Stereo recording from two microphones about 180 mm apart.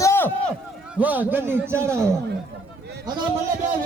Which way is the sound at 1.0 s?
10° right (ahead or behind).